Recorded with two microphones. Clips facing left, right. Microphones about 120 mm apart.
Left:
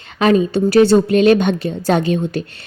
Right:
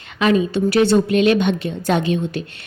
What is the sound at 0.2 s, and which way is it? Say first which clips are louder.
A woman's voice: left 3 dB; 40° left (ahead or behind).